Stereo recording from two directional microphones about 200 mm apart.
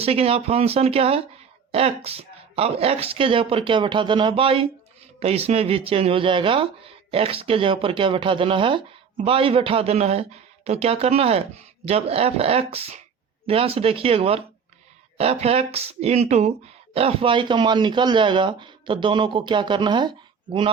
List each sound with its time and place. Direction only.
0.0 s speech: 30° right (ahead or behind)